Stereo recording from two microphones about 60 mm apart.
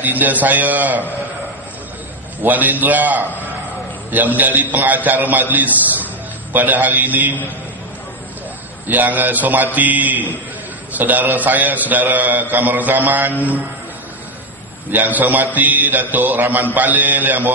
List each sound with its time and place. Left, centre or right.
0.0 s a man's voice: right
2.4 s a man's voice: right
8.8 s a man's voice: right
14.9 s a man's voice: right